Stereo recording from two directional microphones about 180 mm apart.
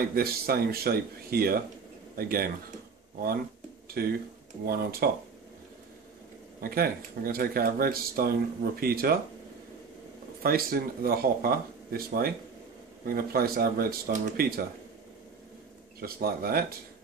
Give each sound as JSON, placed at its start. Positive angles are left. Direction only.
{"t": 0.1, "sound": "speech", "side_deg": -55}
{"t": 4.0, "sound": "speech", "side_deg": -60}
{"t": 6.6, "sound": "speech", "side_deg": -55}
{"t": 10.4, "sound": "speech", "side_deg": -55}
{"t": 16.0, "sound": "speech", "side_deg": -55}